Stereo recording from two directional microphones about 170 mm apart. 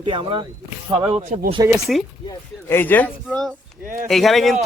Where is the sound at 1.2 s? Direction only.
50° right (ahead or behind).